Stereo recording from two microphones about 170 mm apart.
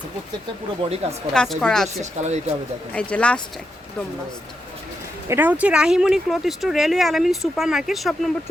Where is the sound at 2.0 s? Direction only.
40° right (ahead or behind).